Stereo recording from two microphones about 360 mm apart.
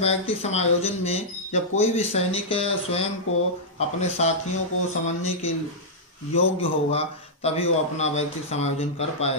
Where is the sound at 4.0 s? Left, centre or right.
Centre.